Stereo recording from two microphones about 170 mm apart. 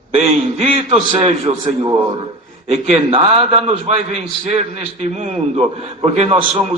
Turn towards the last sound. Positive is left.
turn(degrees=-40)  # may be behind; listen again after turning